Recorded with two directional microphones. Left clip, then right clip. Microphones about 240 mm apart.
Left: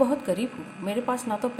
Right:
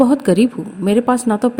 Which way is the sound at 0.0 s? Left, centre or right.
Right.